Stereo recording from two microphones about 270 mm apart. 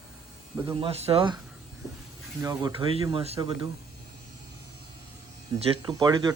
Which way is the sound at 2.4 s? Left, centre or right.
Centre.